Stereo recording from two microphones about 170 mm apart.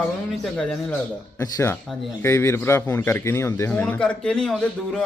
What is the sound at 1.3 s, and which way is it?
A man's voice, 15° left (ahead or behind).